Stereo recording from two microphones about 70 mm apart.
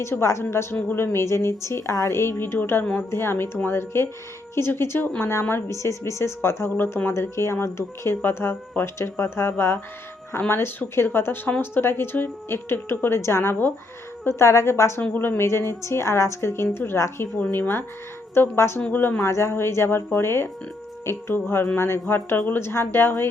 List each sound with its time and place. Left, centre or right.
0.0 s speech: left
14.3 s speech: left
15.1 s speech: left
15.8 s speech: left
18.8 s speech: left
19.2 s speech: left